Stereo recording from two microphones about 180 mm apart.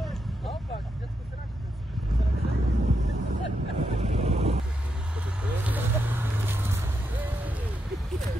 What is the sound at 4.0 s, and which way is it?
Boat, 35° right (ahead or behind).